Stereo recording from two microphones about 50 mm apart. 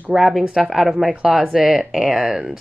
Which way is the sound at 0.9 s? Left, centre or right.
Centre.